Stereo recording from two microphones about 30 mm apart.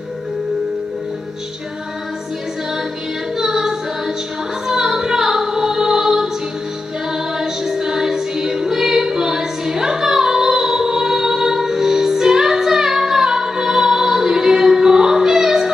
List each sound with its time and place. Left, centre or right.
3.3 s music: centre
7.3 s music: centre